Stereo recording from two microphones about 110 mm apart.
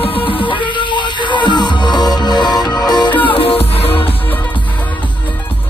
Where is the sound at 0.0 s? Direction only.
55° left (ahead or behind).